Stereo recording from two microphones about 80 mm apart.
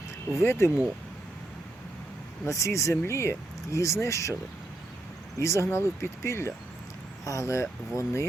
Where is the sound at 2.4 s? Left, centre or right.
Left.